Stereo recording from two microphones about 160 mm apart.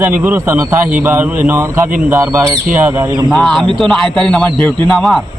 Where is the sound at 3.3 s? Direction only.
Centre (ahead or behind).